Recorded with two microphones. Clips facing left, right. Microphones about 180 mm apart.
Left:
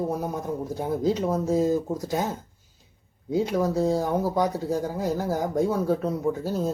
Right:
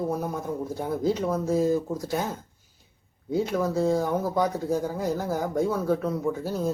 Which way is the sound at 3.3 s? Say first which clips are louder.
Left 1 dB; 15° left (ahead or behind).